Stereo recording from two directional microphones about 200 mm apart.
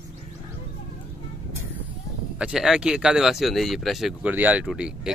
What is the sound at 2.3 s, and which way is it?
Speech, 5° right (ahead or behind).